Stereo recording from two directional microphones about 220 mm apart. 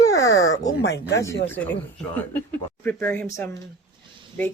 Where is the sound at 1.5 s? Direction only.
10° left (ahead or behind).